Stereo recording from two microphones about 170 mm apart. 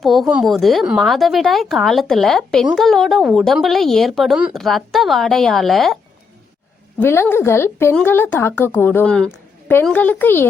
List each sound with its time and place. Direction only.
0.0 s speech: centre (ahead or behind)
7.0 s a woman's voice: 15° left (ahead or behind)